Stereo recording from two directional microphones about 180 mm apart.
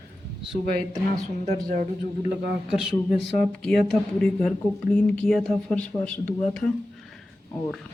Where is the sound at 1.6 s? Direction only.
50° right (ahead or behind).